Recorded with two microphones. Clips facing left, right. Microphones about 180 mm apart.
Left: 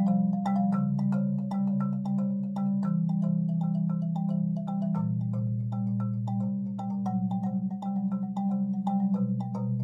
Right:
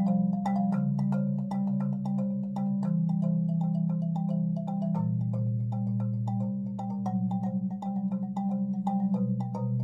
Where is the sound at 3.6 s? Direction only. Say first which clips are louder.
Even; 20° right (ahead or behind).